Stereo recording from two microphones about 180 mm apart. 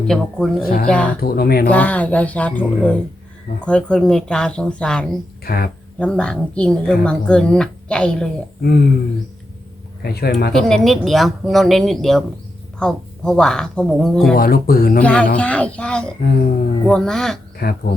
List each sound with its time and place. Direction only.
0.1 s speech: centre (ahead or behind)
0.6 s speech: 55° left (ahead or behind)
0.9 s speech: 5° left (ahead or behind)
1.2 s speech: 60° left (ahead or behind)
1.7 s speech: 10° left (ahead or behind)
5.5 s speech: 55° left (ahead or behind)
6.0 s speech: 5° left (ahead or behind)
8.6 s speech: 65° left (ahead or behind)
10.0 s speech: 60° left (ahead or behind)
10.5 s speech: centre (ahead or behind)
14.3 s speech: 55° left (ahead or behind)
15.0 s speech: 5° left (ahead or behind)
17.6 s speech: 60° left (ahead or behind)